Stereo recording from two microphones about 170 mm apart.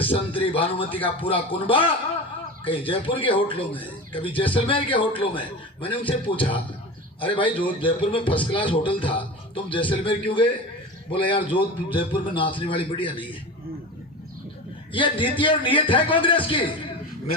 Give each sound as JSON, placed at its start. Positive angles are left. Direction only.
{"t": 0.0, "sound": "a man's voice", "side_deg": 30}
{"t": 14.9, "sound": "a man's voice", "side_deg": 30}